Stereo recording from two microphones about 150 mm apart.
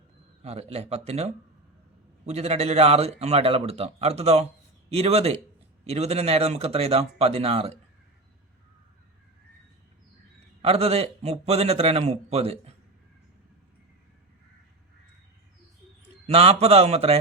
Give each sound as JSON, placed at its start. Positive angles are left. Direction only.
{"t": 0.4, "sound": "a man's voice", "side_deg": -45}
{"t": 10.6, "sound": "a man's voice", "side_deg": -40}
{"t": 16.2, "sound": "a man's voice", "side_deg": -40}